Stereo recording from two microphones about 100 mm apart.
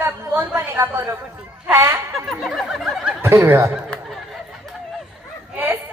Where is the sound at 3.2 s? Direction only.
25° right (ahead or behind).